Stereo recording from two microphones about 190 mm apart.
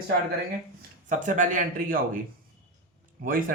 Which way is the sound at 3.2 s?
45° right (ahead or behind).